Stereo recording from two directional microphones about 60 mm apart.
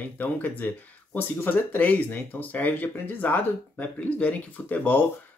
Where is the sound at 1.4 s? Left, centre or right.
Left.